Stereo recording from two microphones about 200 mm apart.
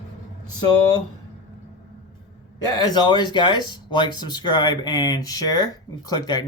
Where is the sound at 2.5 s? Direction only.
20° left (ahead or behind).